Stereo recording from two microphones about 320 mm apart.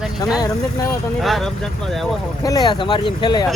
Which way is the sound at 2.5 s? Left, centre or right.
Centre.